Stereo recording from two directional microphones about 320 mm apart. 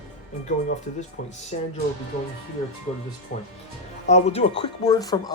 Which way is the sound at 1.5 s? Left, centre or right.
Left.